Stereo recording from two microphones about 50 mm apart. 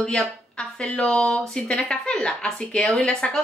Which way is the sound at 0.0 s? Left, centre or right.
Centre.